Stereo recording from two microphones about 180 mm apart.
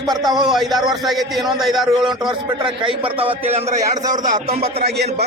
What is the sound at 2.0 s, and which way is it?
A man's voice, 25° right (ahead or behind).